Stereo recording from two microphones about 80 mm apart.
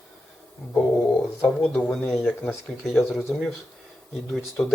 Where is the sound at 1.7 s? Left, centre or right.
Centre.